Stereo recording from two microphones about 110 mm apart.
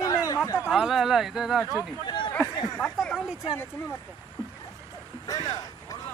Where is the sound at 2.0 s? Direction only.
45° left (ahead or behind).